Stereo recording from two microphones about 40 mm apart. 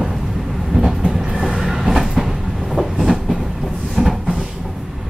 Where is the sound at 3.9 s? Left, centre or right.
Centre.